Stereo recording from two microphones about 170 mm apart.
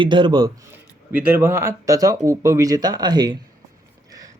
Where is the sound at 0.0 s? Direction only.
25° right (ahead or behind).